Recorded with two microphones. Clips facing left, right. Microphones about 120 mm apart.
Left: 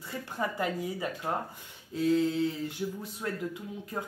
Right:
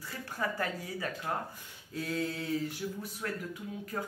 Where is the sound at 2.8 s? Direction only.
15° left (ahead or behind).